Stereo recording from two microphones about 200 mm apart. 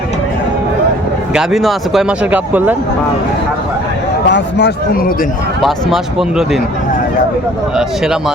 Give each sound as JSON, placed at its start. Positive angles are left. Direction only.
{"t": 1.3, "sound": "speech", "side_deg": -5}
{"t": 4.3, "sound": "speech", "side_deg": 60}
{"t": 5.6, "sound": "speech", "side_deg": 0}
{"t": 7.8, "sound": "speech", "side_deg": -5}